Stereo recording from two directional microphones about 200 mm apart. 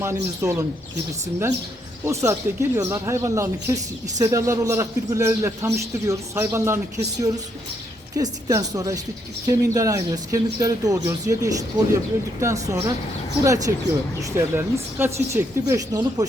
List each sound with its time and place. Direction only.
0.0 s speech: 15° right (ahead or behind)
2.0 s speech: 15° right (ahead or behind)